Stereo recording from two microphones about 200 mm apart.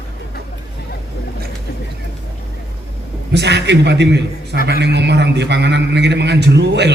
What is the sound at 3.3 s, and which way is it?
A man's voice, 60° right (ahead or behind).